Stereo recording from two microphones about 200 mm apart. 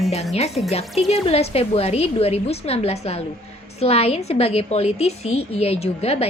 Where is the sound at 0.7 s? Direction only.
30° left (ahead or behind).